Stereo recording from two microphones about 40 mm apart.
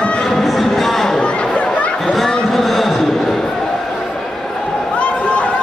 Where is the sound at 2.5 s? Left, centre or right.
Centre.